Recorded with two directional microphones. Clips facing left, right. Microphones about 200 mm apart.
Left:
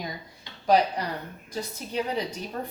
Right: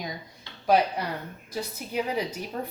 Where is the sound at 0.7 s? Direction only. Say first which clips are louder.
Left 1 dB; 5° right (ahead or behind).